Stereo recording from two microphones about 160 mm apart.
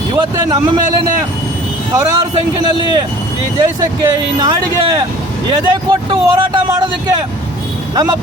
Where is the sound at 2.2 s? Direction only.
25° right (ahead or behind).